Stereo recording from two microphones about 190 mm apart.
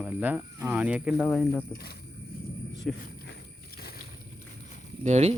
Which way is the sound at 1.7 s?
55° left (ahead or behind).